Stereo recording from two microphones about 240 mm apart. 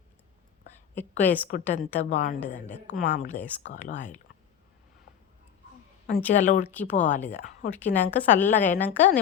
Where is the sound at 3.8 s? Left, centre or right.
Left.